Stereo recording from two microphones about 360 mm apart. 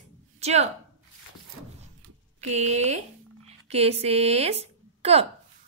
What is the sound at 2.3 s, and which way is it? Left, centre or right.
Speech, centre.